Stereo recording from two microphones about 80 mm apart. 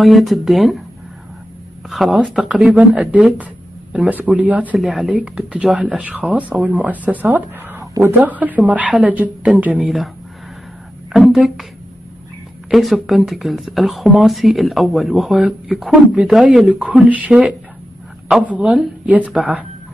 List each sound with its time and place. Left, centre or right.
0.0 s speech: centre
1.9 s speech: centre
2.4 s speech: centre
4.7 s speech: centre
5.1 s speech: centre
11.1 s speech: centre
12.6 s speech: centre
15.9 s speech: centre